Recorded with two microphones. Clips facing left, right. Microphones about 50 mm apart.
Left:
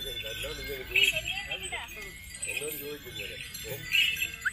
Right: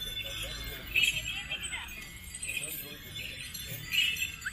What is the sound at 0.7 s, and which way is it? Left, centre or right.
Speech, left.